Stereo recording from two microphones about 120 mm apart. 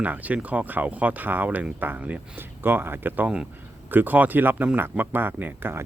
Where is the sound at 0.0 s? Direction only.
15° right (ahead or behind).